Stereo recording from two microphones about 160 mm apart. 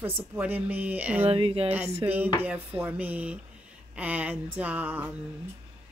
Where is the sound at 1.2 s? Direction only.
35° right (ahead or behind).